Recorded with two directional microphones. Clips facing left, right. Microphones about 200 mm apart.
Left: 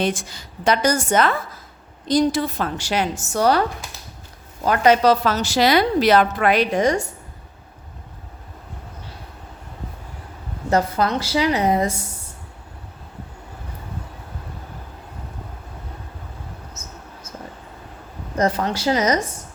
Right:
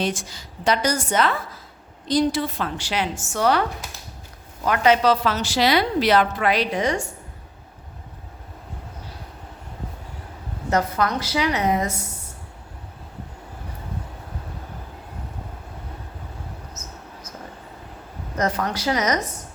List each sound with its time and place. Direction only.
0.0 s a woman's voice: 55° left (ahead or behind); by 3.6 s 40° left (ahead or behind)
4.6 s a woman's voice: 40° left (ahead or behind)
10.7 s a woman's voice: 30° left (ahead or behind)
16.8 s a sound: 25° left (ahead or behind)
18.3 s speech: 30° left (ahead or behind)